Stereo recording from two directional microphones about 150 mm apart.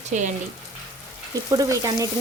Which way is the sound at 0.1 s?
55° right (ahead or behind).